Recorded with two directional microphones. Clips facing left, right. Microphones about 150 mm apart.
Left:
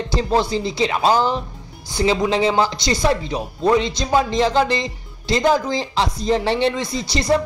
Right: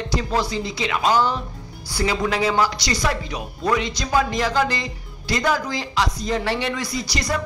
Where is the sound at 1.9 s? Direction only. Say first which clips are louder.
Left 4 dB; 25° left (ahead or behind).